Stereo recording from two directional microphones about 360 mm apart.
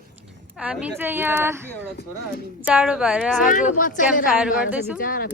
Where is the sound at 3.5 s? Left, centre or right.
Left.